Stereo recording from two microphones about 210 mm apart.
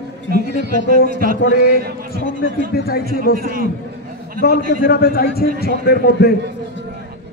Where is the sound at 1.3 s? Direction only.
45° left (ahead or behind).